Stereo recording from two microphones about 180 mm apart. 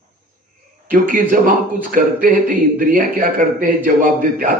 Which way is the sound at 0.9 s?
50° right (ahead or behind).